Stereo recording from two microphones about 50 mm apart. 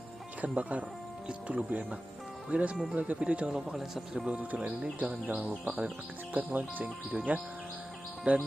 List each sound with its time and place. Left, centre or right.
0.4 s speech: right; by 5.5 s centre
5.6 s speech: right
6.8 s speech: centre
8.3 s speech: right